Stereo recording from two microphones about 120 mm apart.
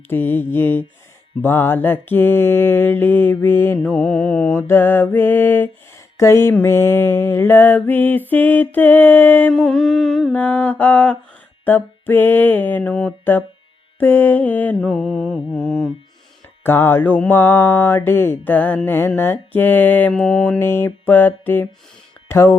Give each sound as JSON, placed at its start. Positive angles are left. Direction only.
{"t": 0.1, "sound": "mantra", "side_deg": 15}
{"t": 3.9, "sound": "mantra", "side_deg": 5}
{"t": 4.5, "sound": "mantra", "side_deg": 20}
{"t": 9.5, "sound": "mantra", "side_deg": 5}
{"t": 10.3, "sound": "mantra", "side_deg": 15}
{"t": 16.6, "sound": "mantra", "side_deg": 20}
{"t": 20.6, "sound": "mantra", "side_deg": 20}
{"t": 22.3, "sound": "speech", "side_deg": 20}